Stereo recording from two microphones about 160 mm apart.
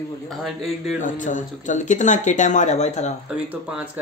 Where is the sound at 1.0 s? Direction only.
50° left (ahead or behind).